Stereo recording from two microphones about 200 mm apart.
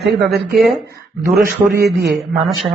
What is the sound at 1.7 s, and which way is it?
Speech, 50° right (ahead or behind).